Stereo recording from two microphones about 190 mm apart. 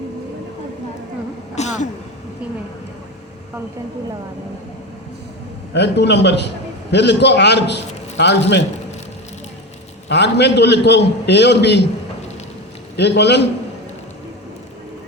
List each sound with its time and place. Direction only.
1.5 s a sound: 35° left (ahead or behind)
5.7 s a man's voice: 65° left (ahead or behind)
10.1 s a man's voice: 65° left (ahead or behind)
13.0 s a man's voice: 65° left (ahead or behind)